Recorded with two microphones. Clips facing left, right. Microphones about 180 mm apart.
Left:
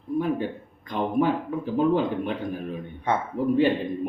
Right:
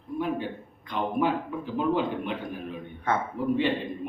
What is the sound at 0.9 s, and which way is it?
Speech, 45° left (ahead or behind).